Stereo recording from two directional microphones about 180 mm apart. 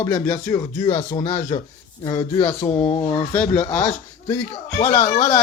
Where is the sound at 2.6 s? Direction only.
35° left (ahead or behind).